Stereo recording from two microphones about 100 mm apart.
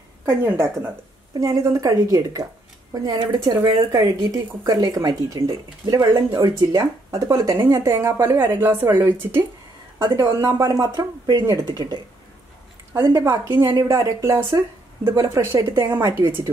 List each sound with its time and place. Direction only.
0.2 s speech: 25° right (ahead or behind)
1.4 s a woman's voice: 35° right (ahead or behind)
13.0 s a woman's voice: 25° right (ahead or behind)